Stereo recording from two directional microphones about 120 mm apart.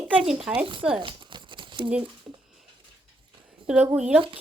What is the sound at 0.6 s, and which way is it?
Speech, 45° right (ahead or behind).